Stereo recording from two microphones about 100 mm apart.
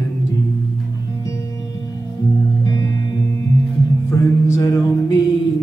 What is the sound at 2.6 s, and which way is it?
Music, 35° left (ahead or behind).